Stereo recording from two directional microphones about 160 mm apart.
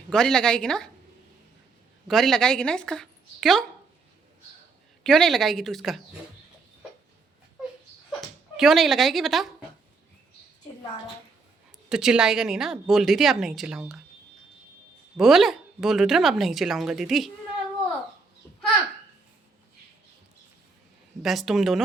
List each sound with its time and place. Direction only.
0.1 s speech: 5° left (ahead or behind)
2.0 s speech: centre (ahead or behind)
5.0 s speech: 5° left (ahead or behind)
8.5 s speech: centre (ahead or behind)
11.9 s speech: 5° right (ahead or behind)
15.2 s speech: centre (ahead or behind)
21.2 s speech: centre (ahead or behind)